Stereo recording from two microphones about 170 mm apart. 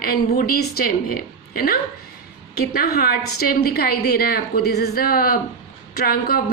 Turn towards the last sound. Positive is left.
turn(degrees=60)  # may be behind; listen again after turning